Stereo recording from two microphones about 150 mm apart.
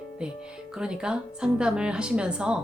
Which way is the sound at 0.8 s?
5° right (ahead or behind).